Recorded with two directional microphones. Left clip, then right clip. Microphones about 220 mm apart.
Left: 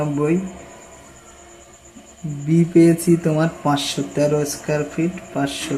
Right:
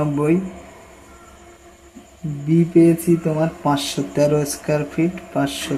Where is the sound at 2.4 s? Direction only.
5° left (ahead or behind).